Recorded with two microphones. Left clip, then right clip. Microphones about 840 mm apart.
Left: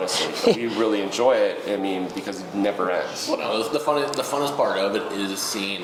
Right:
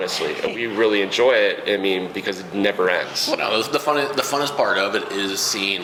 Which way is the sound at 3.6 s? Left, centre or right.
Right.